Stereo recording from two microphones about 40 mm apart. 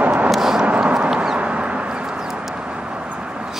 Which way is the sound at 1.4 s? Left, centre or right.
Right.